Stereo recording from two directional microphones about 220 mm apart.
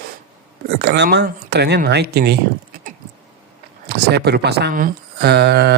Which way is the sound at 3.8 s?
50° right (ahead or behind).